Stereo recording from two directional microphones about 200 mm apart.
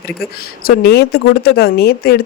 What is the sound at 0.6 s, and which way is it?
Speech, 55° left (ahead or behind).